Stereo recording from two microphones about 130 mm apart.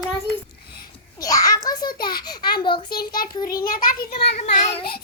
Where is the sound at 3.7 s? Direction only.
90° left.